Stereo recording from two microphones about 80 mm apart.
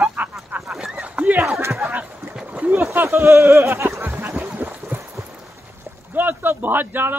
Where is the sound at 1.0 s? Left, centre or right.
Centre.